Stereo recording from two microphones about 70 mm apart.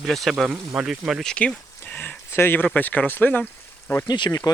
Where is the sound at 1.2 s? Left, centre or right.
Centre.